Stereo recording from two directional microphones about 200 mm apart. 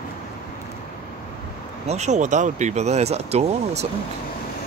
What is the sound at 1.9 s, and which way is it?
Speech, 35° right (ahead or behind).